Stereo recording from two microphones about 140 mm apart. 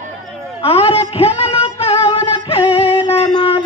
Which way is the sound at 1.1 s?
45° left (ahead or behind).